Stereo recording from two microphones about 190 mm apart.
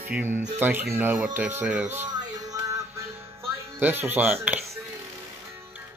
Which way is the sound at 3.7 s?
10° right (ahead or behind).